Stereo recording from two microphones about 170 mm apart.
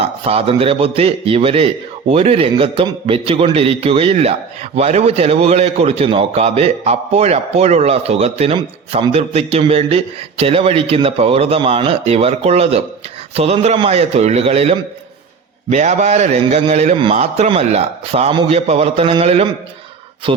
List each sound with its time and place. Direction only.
0.3 s a man's voice: 35° right (ahead or behind)